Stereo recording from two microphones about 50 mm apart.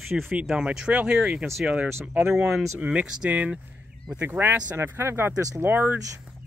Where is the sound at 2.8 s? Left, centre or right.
Right.